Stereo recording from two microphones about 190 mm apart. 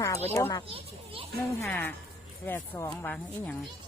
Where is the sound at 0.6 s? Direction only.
30° right (ahead or behind).